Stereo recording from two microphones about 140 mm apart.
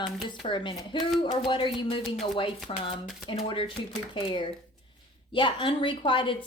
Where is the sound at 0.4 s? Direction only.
35° left (ahead or behind).